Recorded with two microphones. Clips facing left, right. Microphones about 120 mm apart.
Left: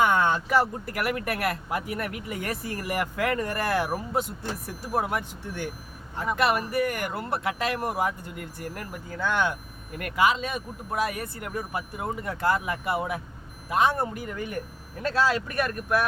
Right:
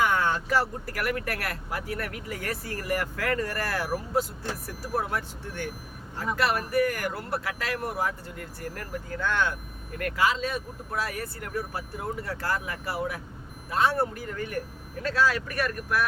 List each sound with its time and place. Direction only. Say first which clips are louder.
0.0 s speech: left 3 dB; 25° left (ahead or behind)